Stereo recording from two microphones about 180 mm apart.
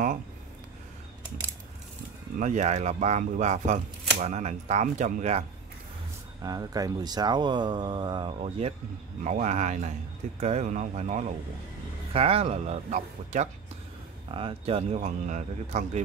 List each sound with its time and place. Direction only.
2.3 s speech: 40° right (ahead or behind)
6.4 s speech: 20° right (ahead or behind); by 16.0 s 40° right (ahead or behind)